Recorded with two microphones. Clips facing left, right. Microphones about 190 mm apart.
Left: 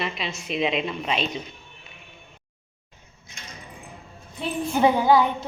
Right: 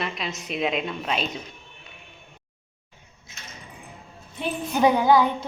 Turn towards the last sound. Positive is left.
turn(degrees=25)  # may be behind; listen again after turning